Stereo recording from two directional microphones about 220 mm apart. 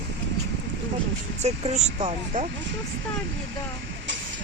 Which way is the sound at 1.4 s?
30° right (ahead or behind).